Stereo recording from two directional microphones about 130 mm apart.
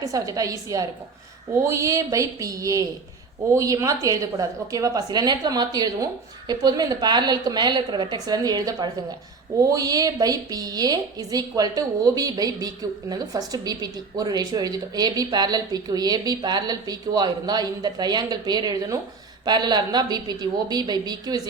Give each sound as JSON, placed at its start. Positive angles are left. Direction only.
{"t": 0.0, "sound": "a woman's voice", "side_deg": -25}